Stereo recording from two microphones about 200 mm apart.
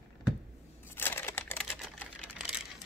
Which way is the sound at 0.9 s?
10° left (ahead or behind).